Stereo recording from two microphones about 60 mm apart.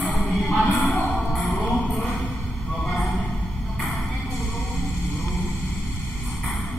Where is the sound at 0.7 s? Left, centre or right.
Left.